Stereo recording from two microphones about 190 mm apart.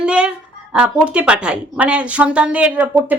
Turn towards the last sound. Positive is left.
turn(degrees=-10)  # may be behind; listen again after turning